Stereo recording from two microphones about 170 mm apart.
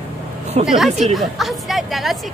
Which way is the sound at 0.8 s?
40° right (ahead or behind).